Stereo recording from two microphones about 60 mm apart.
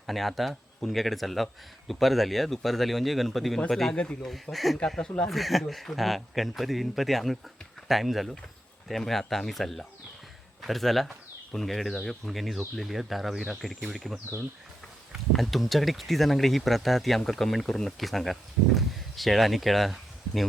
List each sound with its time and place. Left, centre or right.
0.1 s speech: centre
3.9 s speech: left
4.5 s speech: centre
15.3 s speech: centre